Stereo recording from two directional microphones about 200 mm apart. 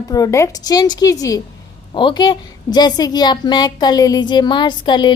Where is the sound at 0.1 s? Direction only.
15° left (ahead or behind).